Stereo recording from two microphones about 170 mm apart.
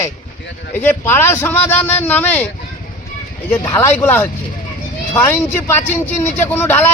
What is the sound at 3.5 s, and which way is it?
Speech, 15° left (ahead or behind).